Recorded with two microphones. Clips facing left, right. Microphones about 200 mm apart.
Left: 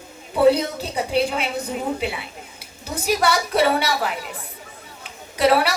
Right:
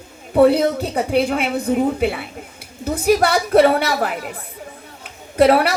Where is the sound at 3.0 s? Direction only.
55° right (ahead or behind).